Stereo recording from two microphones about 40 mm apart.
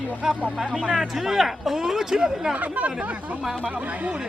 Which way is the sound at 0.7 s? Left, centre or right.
Right.